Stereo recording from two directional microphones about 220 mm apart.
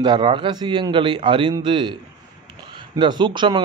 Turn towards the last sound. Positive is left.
turn(degrees=-20)  # may be behind; listen again after turning